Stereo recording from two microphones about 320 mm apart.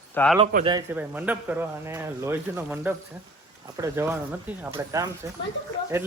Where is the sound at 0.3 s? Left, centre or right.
Centre.